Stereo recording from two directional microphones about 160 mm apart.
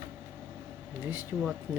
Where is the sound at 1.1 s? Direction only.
10° right (ahead or behind).